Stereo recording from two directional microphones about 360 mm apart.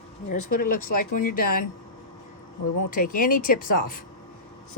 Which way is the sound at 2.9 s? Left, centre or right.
Left.